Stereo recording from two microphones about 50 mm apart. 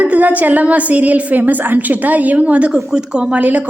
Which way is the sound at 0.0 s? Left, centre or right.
Right.